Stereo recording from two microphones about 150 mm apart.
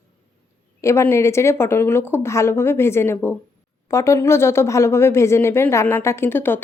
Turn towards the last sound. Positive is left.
turn(degrees=15)  # may be behind; listen again after turning